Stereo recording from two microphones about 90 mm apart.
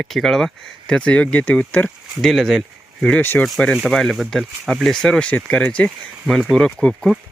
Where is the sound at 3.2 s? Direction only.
25° left (ahead or behind).